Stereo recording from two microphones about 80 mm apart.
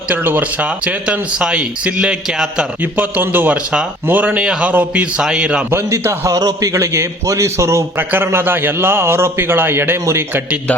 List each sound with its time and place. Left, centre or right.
0.1 s speech: right; by 2.6 s centre
2.8 s a man's voice: right
3.5 s speech: centre
4.0 s speech: right; by 5.6 s centre
5.7 s a man's voice: right
6.3 s a man's voice: right
7.9 s a man's voice: right